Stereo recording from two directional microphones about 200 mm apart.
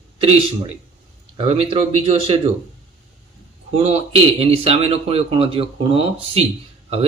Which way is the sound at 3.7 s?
30° right (ahead or behind).